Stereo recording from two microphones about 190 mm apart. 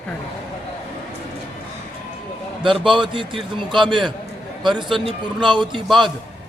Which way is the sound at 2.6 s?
25° right (ahead or behind).